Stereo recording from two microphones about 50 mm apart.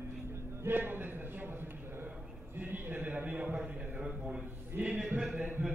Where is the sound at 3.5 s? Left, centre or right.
Right.